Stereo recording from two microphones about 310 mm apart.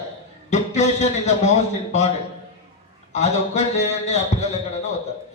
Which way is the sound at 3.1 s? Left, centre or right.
Left.